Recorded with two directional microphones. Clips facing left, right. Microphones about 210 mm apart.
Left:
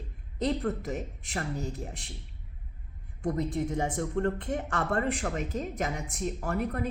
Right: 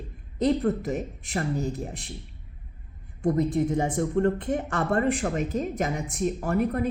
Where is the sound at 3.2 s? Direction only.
25° right (ahead or behind).